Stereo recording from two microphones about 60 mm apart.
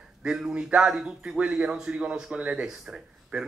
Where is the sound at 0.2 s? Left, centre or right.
Centre.